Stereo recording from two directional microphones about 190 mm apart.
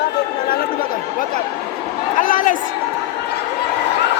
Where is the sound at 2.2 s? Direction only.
45° left (ahead or behind).